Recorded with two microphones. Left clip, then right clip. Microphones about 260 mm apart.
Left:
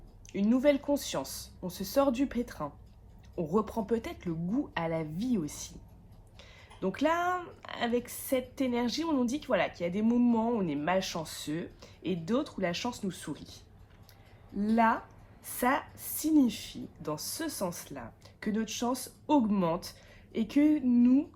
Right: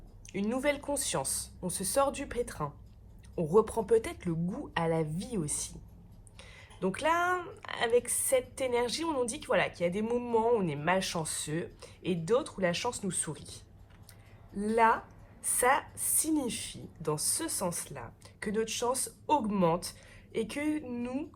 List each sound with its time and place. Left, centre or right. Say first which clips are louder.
0.3 s speech: left 4 dB; right
14.6 s speech: right 1 dB; right